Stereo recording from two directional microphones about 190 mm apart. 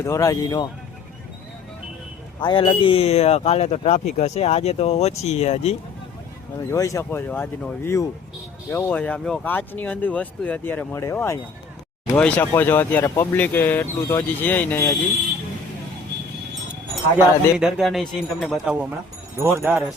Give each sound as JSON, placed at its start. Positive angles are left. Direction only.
{"t": 0.0, "sound": "speech", "side_deg": 15}
{"t": 2.4, "sound": "speech", "side_deg": 25}
{"t": 6.7, "sound": "speech", "side_deg": 15}
{"t": 17.6, "sound": "speech", "side_deg": 0}